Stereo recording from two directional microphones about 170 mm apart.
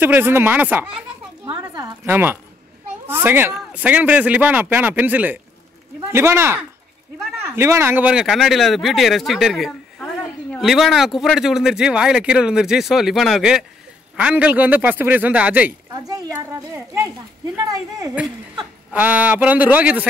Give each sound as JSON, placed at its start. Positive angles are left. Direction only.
{"t": 0.0, "sound": "a man's voice", "side_deg": -10}
{"t": 1.4, "sound": "a sound", "side_deg": -25}
{"t": 2.0, "sound": "a man's voice", "side_deg": -10}
{"t": 15.9, "sound": "a man's voice", "side_deg": -20}
{"t": 18.9, "sound": "a man's voice", "side_deg": -10}